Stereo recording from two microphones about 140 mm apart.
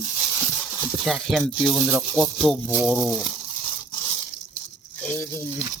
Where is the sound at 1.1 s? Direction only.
Centre (ahead or behind).